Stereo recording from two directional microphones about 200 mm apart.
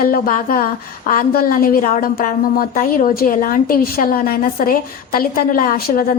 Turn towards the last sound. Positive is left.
turn(degrees=45)  # may be behind; listen again after turning